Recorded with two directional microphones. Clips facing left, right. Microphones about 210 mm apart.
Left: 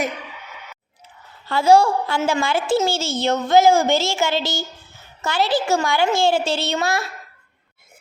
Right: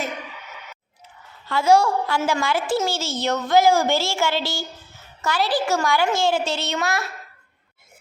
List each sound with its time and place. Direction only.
1.5 s a woman's voice: 30° left (ahead or behind)